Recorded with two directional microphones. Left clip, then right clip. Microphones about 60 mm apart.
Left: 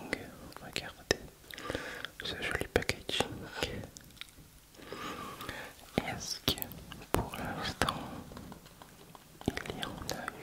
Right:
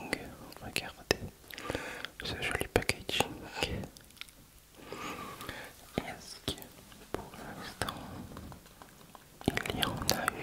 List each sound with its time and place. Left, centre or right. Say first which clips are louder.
0.0 s whispering: right 1 dB; centre
4.8 s a sound: even; centre
5.9 s whispering: left 4 dB; left
7.1 s dog: left 7 dB; left
7.4 s whispering: left 6 dB; left
9.4 s whispering: right 5 dB; right